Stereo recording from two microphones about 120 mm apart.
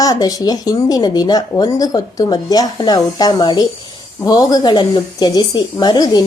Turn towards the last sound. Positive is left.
turn(degrees=35)  # may be behind; listen again after turning